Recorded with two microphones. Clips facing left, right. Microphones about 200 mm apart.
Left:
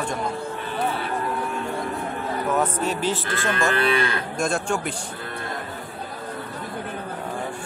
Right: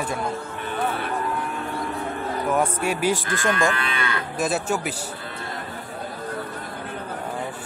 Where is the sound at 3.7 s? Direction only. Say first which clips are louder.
Left 5 dB; 35° left (ahead or behind).